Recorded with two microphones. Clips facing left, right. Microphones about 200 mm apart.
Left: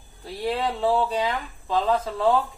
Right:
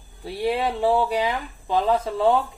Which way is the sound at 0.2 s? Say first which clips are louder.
Right 3 dB; 10° right (ahead or behind).